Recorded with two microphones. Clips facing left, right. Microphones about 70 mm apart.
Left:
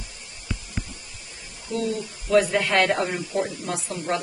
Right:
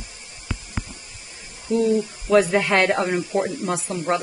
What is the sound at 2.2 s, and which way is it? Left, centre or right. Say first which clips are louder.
Speech: right 2 dB; right.